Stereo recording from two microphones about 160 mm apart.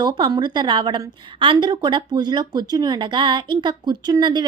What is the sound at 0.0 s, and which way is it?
A woman's voice, 30° right (ahead or behind).